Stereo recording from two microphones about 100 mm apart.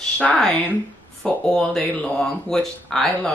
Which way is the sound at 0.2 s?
10° left (ahead or behind).